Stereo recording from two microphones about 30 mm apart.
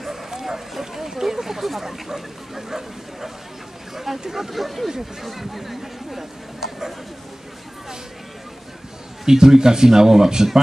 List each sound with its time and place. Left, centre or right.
0.0 s speech: centre
9.2 s speech: centre